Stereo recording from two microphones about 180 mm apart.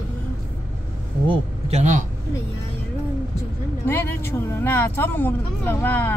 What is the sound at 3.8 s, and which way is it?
Speech, 10° left (ahead or behind).